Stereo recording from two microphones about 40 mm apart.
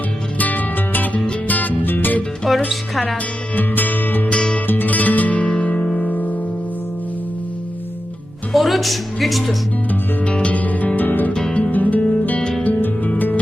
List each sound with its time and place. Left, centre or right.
0.3 s music: left
2.5 s music: centre
3.5 s music: left
4.3 s music: left
4.6 s music: left
4.9 s music: left
6.1 s music: left
8.5 s speech: centre
10.2 s music: left